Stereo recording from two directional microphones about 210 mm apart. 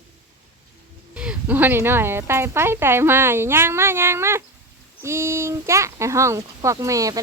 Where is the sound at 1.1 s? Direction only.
5° right (ahead or behind).